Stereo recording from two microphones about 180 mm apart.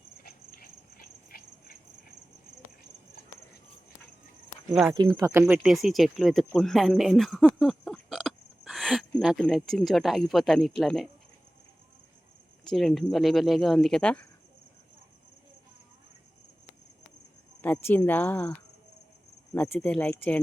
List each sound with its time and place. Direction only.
0.2 s insect: 55° left (ahead or behind)
4.7 s speech: centre (ahead or behind)
5.1 s speech: 15° right (ahead or behind)
5.6 s speech: centre (ahead or behind)
12.6 s speech: centre (ahead or behind)
17.6 s speech: 10° left (ahead or behind)
19.5 s speech: 10° left (ahead or behind)